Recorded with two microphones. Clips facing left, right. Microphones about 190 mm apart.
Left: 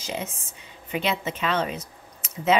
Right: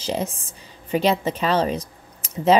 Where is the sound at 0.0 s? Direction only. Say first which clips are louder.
Right 6 dB; 35° right (ahead or behind).